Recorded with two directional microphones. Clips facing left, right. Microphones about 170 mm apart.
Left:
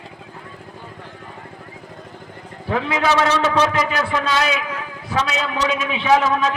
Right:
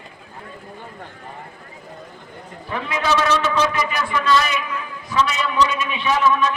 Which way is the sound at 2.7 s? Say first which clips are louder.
Left 3 dB; 85° left.